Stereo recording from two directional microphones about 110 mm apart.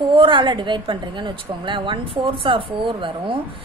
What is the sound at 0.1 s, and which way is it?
A woman's voice, 50° right (ahead or behind).